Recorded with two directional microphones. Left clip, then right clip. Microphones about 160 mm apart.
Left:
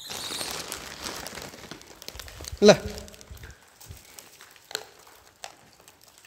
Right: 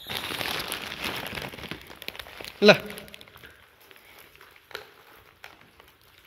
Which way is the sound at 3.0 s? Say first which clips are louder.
Right 1 dB; 25° right (ahead or behind).